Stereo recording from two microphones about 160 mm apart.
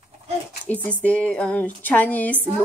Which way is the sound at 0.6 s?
10° left (ahead or behind).